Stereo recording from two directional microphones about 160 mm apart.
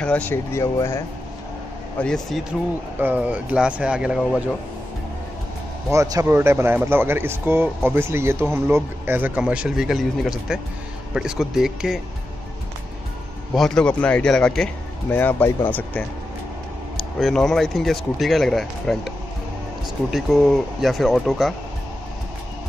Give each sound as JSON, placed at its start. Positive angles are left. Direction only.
{"t": 0.0, "sound": "speech", "side_deg": 10}
{"t": 2.0, "sound": "speech", "side_deg": 5}
{"t": 3.0, "sound": "speech", "side_deg": -10}
{"t": 5.9, "sound": "speech", "side_deg": -20}
{"t": 13.6, "sound": "speech", "side_deg": 5}